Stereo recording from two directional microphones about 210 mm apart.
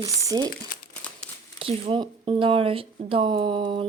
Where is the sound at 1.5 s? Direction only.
25° right (ahead or behind).